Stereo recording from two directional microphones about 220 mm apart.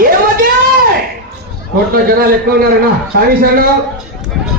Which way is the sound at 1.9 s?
40° right (ahead or behind).